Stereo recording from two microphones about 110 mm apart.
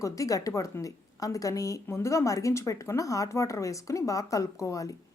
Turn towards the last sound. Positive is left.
turn(degrees=30)  # may be behind; listen again after turning